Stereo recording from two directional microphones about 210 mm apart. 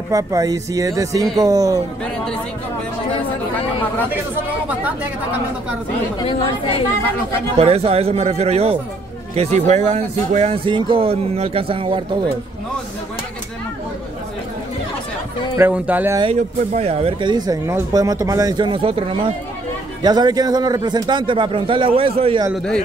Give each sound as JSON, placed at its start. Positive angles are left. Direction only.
{"t": 0.1, "sound": "speech", "side_deg": -15}
{"t": 4.6, "sound": "speech", "side_deg": -5}
{"t": 7.5, "sound": "speech", "side_deg": -30}
{"t": 15.5, "sound": "speech", "side_deg": -10}
{"t": 16.2, "sound": "speech", "side_deg": -30}